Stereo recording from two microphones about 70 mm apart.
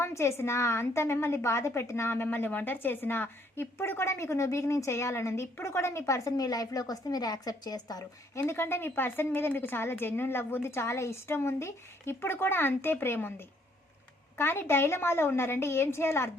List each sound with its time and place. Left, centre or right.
0.0 s a woman's voice: left
6.3 s a woman's voice: left
8.4 s a woman's voice: left
14.3 s a woman's voice: left